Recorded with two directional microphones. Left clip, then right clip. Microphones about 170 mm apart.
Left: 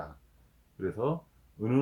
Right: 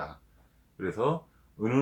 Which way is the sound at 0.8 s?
20° left (ahead or behind).